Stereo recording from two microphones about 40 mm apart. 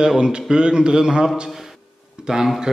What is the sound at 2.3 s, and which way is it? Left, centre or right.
Speech, centre.